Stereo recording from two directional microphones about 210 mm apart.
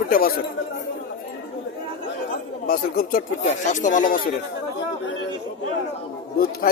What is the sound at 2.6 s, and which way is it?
Speech, 45° left (ahead or behind).